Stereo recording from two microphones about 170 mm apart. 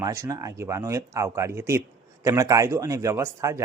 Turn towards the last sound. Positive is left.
turn(degrees=-15)  # may be behind; listen again after turning